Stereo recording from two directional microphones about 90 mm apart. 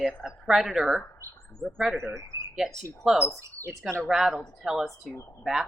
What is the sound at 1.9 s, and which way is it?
Speech, 30° right (ahead or behind).